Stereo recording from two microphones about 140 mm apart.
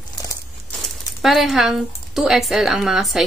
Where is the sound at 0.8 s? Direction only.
Centre (ahead or behind).